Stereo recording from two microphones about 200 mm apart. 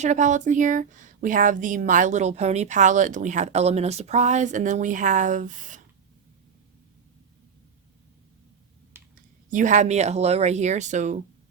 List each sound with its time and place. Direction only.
0.0 s speech: 35° right (ahead or behind)
8.9 s typing: 10° right (ahead or behind)
9.5 s speech: 40° right (ahead or behind)